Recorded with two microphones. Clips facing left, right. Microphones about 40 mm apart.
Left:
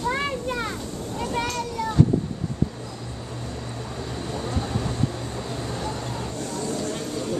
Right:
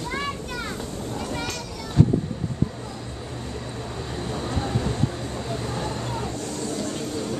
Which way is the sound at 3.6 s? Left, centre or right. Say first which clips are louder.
Even; centre.